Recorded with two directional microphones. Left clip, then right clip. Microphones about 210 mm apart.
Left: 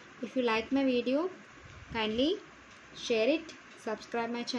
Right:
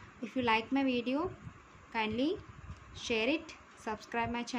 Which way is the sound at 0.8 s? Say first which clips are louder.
Left 4 dB; centre (ahead or behind).